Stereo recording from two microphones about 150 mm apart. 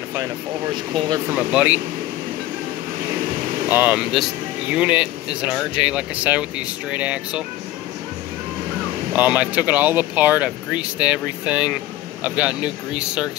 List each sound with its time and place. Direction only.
0.9 s speech: 30° right (ahead or behind)
1.3 s speech: 10° right (ahead or behind)
3.7 s speech: 10° right (ahead or behind)
9.1 s speech: 10° right (ahead or behind)